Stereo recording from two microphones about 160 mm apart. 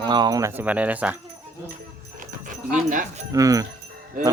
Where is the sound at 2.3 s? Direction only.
55° right (ahead or behind).